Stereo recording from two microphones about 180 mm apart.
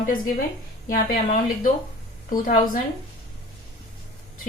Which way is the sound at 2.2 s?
50° left (ahead or behind).